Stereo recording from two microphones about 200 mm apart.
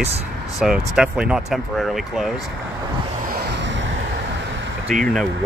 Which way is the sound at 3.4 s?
60° right (ahead or behind).